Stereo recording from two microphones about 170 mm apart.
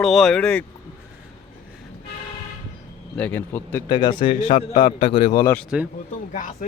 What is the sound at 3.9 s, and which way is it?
A man's voice, 25° left (ahead or behind).